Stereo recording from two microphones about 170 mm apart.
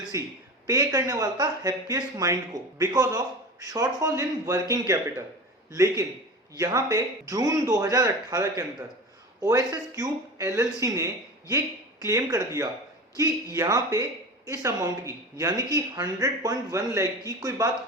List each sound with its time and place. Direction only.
0.1 s speech: 20° right (ahead or behind)
5.7 s speech: 20° right (ahead or behind)